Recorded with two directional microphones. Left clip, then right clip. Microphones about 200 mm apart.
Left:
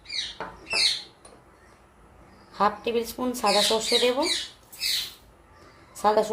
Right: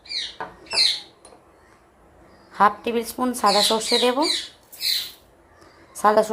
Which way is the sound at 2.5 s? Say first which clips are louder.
Right 5 dB; 25° right (ahead or behind).